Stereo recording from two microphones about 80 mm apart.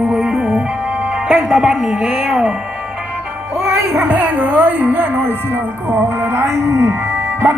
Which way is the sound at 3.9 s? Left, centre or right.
Centre.